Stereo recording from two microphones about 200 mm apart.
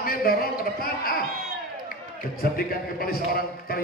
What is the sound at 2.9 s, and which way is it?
Speech, 50° left (ahead or behind).